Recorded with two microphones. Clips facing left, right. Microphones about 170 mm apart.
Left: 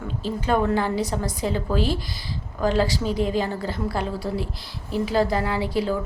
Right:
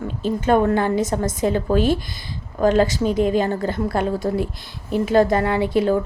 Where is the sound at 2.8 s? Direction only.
20° right (ahead or behind).